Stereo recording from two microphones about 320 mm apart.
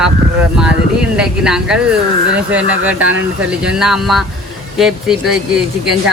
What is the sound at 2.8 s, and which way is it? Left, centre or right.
Speech, centre.